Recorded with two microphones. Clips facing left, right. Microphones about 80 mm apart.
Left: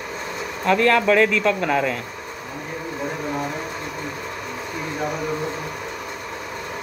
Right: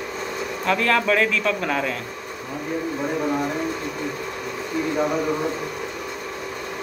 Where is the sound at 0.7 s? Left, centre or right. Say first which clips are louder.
Left 3 dB; centre.